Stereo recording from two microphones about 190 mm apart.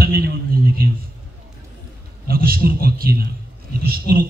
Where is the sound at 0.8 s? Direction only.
55° right (ahead or behind).